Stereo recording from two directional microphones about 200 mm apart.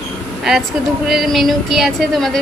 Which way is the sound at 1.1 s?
Centre (ahead or behind).